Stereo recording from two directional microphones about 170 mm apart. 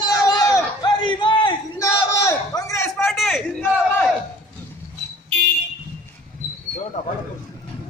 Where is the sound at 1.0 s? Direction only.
30° left (ahead or behind).